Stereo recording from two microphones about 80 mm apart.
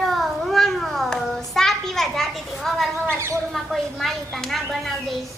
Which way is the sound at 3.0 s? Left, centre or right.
Right.